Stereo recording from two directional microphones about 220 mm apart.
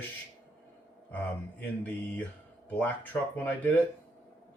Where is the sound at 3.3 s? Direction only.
5° left (ahead or behind).